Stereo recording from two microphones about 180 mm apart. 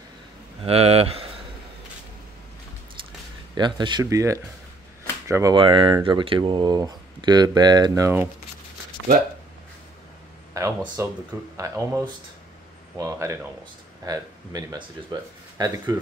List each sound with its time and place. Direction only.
0.7 s speech: 35° right (ahead or behind)
3.5 s speech: 25° right (ahead or behind)
10.5 s speech: 15° right (ahead or behind)